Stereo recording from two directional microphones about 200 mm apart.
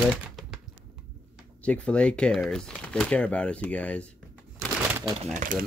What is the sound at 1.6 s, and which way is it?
Speech, 5° left (ahead or behind).